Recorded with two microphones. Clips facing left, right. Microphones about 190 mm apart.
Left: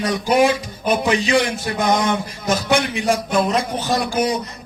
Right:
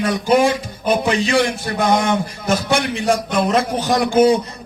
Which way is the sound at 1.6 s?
15° left (ahead or behind).